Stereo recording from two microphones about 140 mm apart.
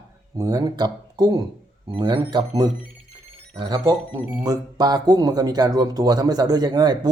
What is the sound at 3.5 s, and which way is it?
Speech, 30° right (ahead or behind).